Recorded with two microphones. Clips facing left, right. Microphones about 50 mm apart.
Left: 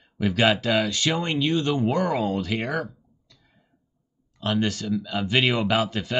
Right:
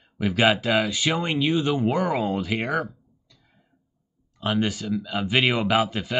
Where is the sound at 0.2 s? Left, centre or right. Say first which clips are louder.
Right 1 dB; centre.